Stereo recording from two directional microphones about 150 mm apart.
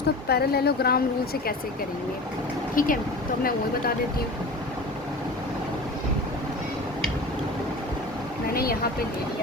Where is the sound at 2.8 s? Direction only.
65° left (ahead or behind).